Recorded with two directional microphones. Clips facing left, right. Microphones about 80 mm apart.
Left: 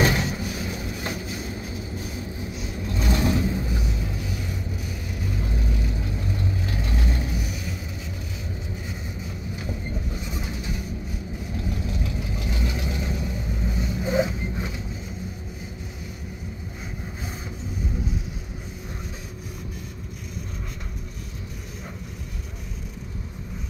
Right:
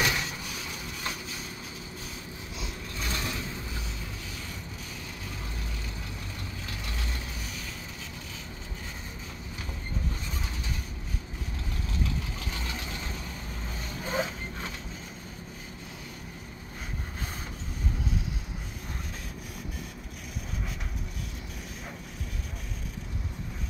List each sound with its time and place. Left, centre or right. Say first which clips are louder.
0.0 s vehicle: left 7 dB; left
6.3 s vehicle: left 10 dB; left
10.1 s train: left 6 dB; centre
11.7 s vehicle: left 4 dB; left